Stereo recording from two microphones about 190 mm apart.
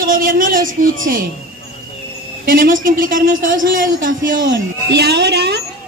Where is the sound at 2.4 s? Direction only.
50° right (ahead or behind).